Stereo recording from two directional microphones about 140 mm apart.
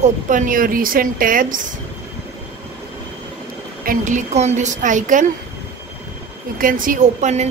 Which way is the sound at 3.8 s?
75° right (ahead or behind).